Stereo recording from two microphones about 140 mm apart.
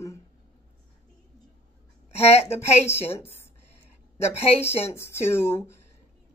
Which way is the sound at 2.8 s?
15° left (ahead or behind).